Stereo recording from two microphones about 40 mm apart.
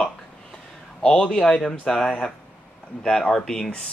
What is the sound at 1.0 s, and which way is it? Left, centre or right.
Speech, centre.